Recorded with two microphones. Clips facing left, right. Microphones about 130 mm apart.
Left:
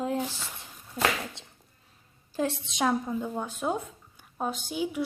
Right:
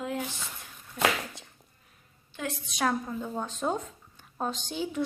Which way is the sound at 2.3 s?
30° left (ahead or behind).